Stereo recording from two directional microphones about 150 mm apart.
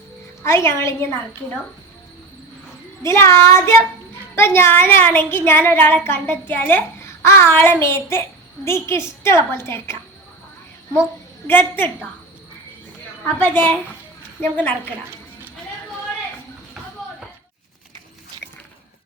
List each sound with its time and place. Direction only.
0.4 s a child's voice: 15° left (ahead or behind)
3.1 s a child's voice: 20° left (ahead or behind)
11.4 s a child's voice: 15° left (ahead or behind)
13.2 s a child's voice: 15° left (ahead or behind)